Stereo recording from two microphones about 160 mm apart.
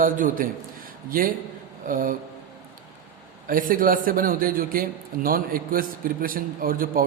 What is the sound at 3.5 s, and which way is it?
A man's voice, 60° right (ahead or behind).